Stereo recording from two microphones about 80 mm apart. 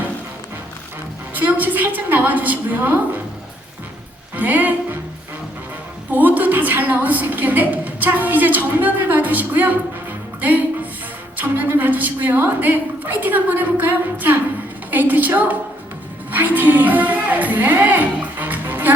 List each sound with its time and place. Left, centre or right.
1.3 s a woman's voice: right
4.4 s a woman's voice: right
6.1 s a woman's voice: right